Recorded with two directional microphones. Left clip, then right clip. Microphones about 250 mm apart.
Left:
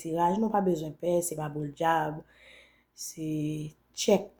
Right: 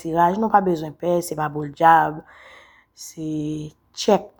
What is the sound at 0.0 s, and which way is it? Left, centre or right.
A woman's voice, centre.